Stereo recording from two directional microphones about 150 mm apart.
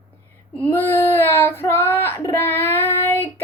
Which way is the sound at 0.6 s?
15° left (ahead or behind).